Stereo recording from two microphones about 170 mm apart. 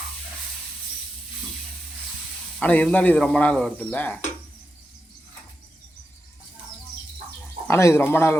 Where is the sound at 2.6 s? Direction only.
10° left (ahead or behind).